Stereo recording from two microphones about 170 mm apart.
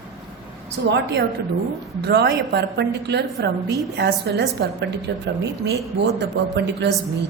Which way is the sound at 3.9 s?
75° right (ahead or behind).